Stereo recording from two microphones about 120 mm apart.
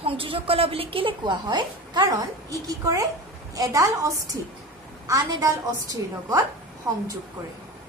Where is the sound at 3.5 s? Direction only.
30° right (ahead or behind).